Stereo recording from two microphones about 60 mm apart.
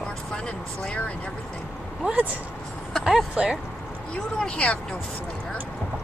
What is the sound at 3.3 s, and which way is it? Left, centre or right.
Speech, centre.